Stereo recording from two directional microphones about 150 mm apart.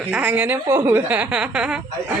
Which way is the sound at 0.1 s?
10° right (ahead or behind).